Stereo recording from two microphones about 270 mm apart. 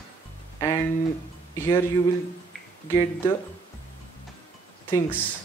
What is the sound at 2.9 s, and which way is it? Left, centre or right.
Speech, centre.